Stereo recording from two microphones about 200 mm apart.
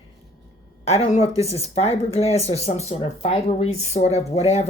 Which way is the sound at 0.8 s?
30° left (ahead or behind).